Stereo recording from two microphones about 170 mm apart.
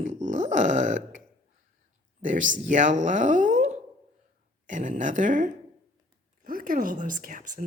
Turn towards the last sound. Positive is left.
turn(degrees=-50)  # may be behind; listen again after turning